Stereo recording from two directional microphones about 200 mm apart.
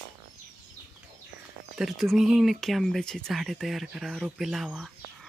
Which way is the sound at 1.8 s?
Centre (ahead or behind).